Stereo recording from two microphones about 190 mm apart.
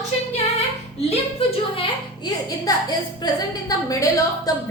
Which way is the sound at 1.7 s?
25° left (ahead or behind).